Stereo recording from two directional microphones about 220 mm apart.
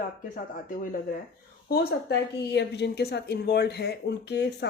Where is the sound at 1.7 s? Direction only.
45° left (ahead or behind).